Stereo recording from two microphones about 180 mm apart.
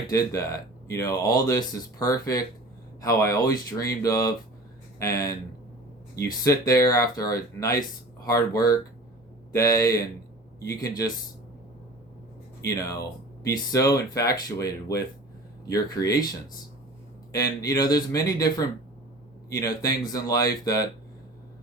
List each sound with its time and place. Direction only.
0.1 s speech: 20° left (ahead or behind)
12.6 s speech: 20° left (ahead or behind)
17.3 s speech: 20° left (ahead or behind)
19.5 s speech: 20° left (ahead or behind)